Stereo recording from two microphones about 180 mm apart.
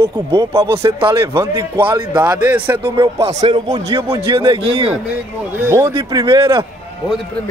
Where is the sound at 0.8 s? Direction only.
30° right (ahead or behind).